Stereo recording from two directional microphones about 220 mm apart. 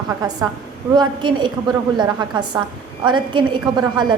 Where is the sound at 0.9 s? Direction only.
20° right (ahead or behind).